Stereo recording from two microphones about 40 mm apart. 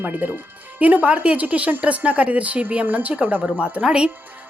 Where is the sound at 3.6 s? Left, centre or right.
Right.